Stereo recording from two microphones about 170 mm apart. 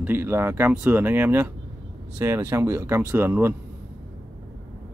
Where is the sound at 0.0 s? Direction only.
10° right (ahead or behind).